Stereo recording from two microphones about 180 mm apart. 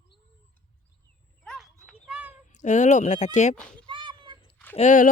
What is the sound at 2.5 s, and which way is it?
Speech, 45° left (ahead or behind).